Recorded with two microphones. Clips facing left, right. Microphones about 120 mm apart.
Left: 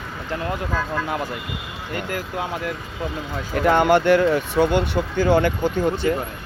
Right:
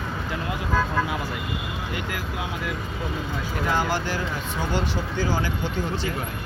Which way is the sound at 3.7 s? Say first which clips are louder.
Left 11 dB; 60° left (ahead or behind).